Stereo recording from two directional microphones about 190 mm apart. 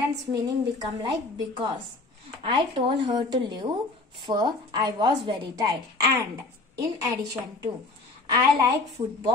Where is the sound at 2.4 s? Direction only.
25° right (ahead or behind).